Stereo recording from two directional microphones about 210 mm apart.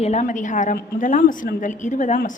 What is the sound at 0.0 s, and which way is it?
A woman's voice, 30° left (ahead or behind).